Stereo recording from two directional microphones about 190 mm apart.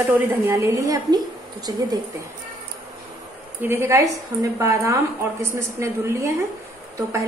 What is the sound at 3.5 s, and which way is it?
A woman's voice, 10° right (ahead or behind).